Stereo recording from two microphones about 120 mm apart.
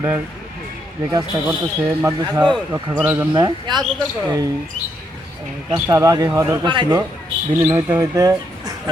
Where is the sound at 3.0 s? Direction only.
15° right (ahead or behind).